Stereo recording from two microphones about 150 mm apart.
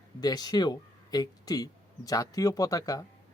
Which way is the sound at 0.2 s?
25° left (ahead or behind).